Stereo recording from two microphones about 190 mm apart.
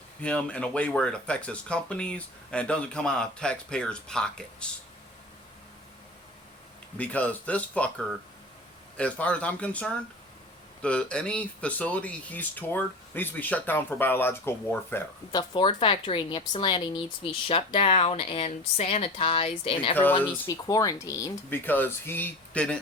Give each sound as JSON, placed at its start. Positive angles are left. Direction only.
{"t": 0.2, "sound": "speech", "side_deg": 5}
{"t": 7.0, "sound": "speech", "side_deg": 5}
{"t": 20.1, "sound": "speech", "side_deg": 20}